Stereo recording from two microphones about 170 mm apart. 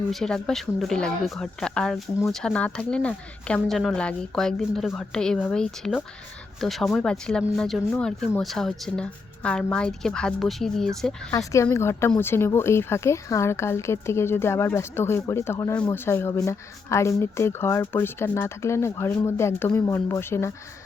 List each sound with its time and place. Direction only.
0.1 s a woman's voice: 5° left (ahead or behind)
11.3 s speech: 20° left (ahead or behind)